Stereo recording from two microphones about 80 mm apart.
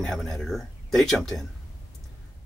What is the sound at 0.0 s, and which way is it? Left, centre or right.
Speech, centre.